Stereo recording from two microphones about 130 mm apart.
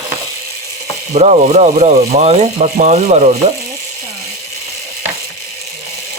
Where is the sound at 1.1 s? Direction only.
60° right (ahead or behind).